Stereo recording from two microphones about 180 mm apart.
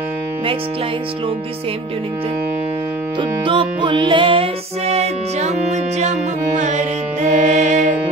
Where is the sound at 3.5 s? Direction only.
25° right (ahead or behind); by 7.9 s 45° right (ahead or behind).